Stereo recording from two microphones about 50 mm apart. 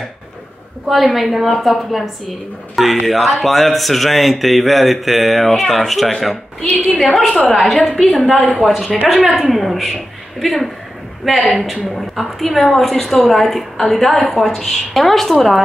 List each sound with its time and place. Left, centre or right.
0.8 s a woman's voice: centre
8.5 s a woman's voice: centre